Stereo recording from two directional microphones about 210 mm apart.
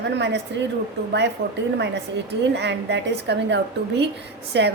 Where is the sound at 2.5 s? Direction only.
55° right (ahead or behind).